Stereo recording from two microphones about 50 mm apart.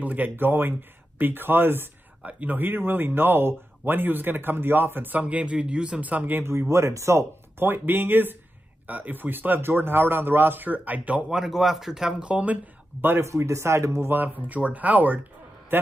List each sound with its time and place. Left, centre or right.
0.0 s speech: right
2.2 s speech: right
5.2 s a man's voice: right
6.7 s speech: right
7.6 s a man's voice: right
11.2 s speech: centre
12.3 s a man's voice: right
13.0 s speech: right
13.3 s speech: right
14.0 s a man's voice: right
15.7 s a man's voice: right